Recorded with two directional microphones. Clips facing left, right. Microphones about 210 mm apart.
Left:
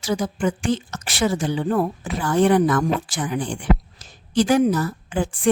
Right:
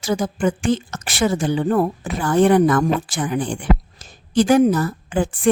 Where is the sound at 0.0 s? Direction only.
50° right (ahead or behind).